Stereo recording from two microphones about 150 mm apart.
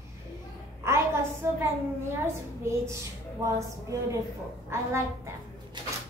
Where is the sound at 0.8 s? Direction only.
15° right (ahead or behind).